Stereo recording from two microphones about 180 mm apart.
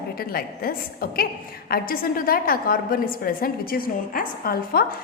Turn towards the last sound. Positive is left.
turn(degrees=55)  # may be behind; listen again after turning